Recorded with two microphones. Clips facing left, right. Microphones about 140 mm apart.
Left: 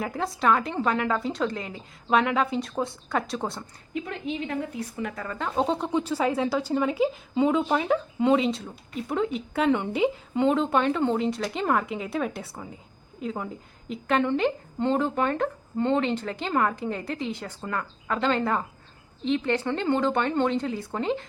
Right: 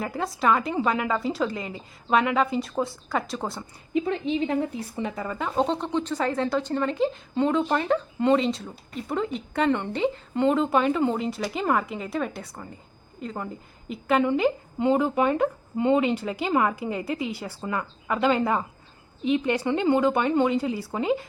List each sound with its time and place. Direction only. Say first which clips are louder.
0.0 s a woman's voice: even; centre (ahead or behind)
3.9 s a woman's voice: right 6 dB; 25° right (ahead or behind)
5.5 s a woman's voice: even; centre (ahead or behind)